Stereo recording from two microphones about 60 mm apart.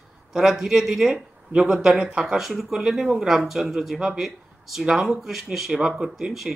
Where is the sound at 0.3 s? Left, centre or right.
Centre.